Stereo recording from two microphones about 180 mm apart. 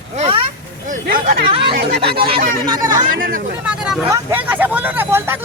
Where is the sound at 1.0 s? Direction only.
55° right (ahead or behind).